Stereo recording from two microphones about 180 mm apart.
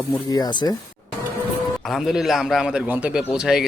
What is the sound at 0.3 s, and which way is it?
Speech, 20° left (ahead or behind).